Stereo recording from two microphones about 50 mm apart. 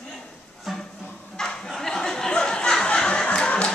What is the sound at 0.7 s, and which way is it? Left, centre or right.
Music, centre.